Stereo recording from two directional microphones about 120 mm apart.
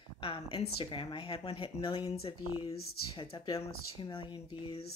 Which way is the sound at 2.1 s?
55° left (ahead or behind).